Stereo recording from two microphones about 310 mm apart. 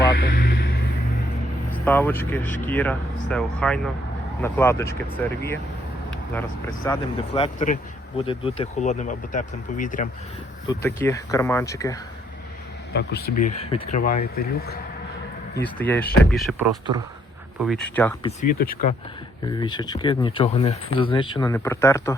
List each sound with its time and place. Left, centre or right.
0.2 s vehicle: left
1.7 s speech: centre
6.8 s speech: centre
10.7 s speech: centre
12.9 s speech: left
13.4 s speech: left
15.6 s speech: centre
17.7 s speech: centre
18.3 s speech: left
19.5 s speech: centre